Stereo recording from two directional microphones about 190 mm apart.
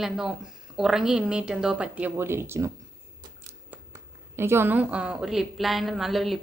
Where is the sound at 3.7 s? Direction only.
10° right (ahead or behind).